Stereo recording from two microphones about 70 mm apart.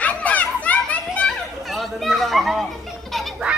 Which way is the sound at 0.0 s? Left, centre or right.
Left.